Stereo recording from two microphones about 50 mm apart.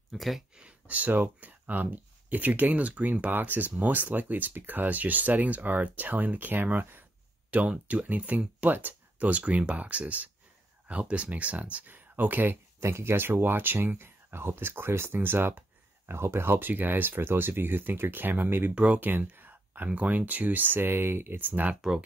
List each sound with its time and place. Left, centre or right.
0.1 s speech: centre
0.6 s speech: right
7.5 s speech: right
12.8 s speech: right
16.1 s speech: right
18.8 s speech: right
21.5 s speech: right